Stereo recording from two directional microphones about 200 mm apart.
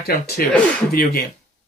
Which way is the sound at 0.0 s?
55° left (ahead or behind).